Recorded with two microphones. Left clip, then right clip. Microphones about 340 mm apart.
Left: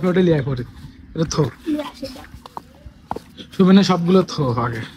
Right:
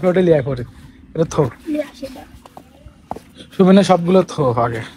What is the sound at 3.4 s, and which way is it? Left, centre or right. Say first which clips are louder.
A man's voice: right 4 dB; centre.